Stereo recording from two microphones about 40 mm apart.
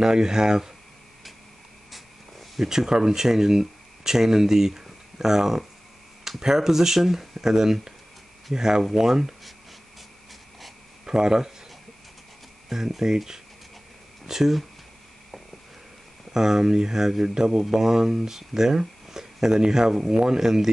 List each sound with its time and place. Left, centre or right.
0.0 s speech: centre
2.6 s speech: centre
11.1 s speech: centre
12.6 s speech: centre
16.3 s speech: centre